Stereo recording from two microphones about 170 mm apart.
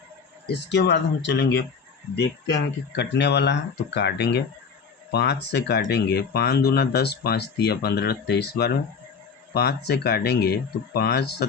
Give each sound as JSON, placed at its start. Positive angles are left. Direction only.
{"t": 0.4, "sound": "speech", "side_deg": 90}